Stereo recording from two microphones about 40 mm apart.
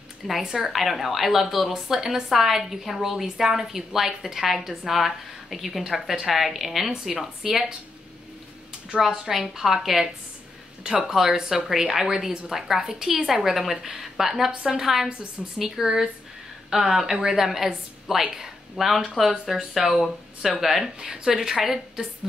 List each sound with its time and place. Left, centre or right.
0.3 s a woman's voice: centre
8.9 s a woman's voice: centre
14.5 s a woman's voice: right
14.8 s a woman's voice: centre
20.8 s a woman's voice: centre